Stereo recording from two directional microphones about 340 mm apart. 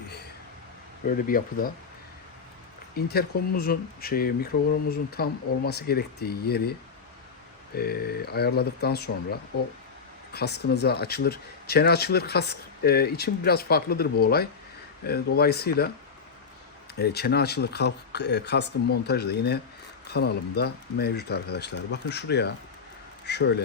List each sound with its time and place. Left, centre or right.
1.0 s speech: left
2.9 s speech: left
7.8 s speech: left
16.9 s speech: left